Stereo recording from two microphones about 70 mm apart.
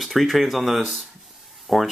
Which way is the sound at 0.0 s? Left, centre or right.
Centre.